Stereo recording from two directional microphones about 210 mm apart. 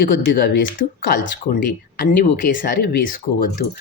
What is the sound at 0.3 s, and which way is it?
Speech, 50° left (ahead or behind).